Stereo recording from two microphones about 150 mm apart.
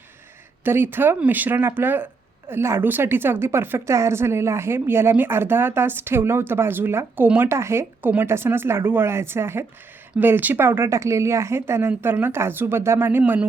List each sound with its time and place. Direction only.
0.6 s a woman's voice: 15° right (ahead or behind)